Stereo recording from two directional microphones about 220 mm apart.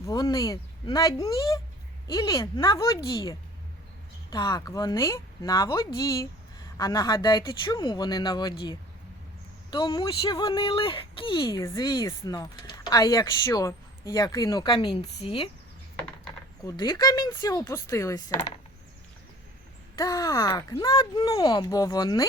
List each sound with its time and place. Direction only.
0.0 s speech: 15° left (ahead or behind)
16.6 s speech: 20° left (ahead or behind)
20.0 s speech: 15° left (ahead or behind)